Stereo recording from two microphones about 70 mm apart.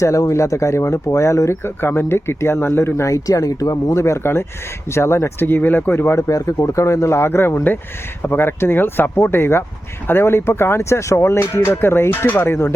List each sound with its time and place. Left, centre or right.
0.0 s speech: left
3.2 s speech: left
6.1 s speech: left